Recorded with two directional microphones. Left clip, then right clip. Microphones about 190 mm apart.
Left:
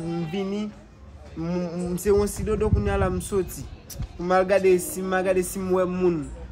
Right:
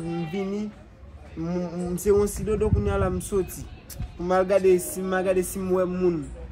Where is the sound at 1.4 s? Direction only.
20° left (ahead or behind).